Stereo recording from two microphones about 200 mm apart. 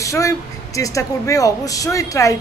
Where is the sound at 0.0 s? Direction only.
15° left (ahead or behind).